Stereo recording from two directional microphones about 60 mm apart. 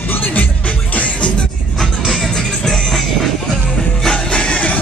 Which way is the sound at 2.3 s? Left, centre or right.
Centre.